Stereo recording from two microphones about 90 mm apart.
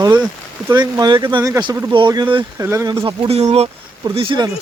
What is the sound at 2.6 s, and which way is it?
Speech, 35° right (ahead or behind).